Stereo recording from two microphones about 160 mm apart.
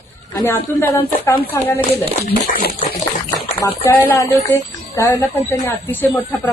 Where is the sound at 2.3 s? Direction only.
70° left (ahead or behind).